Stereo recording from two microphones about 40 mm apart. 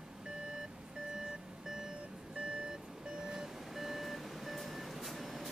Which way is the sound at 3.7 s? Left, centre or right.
Centre.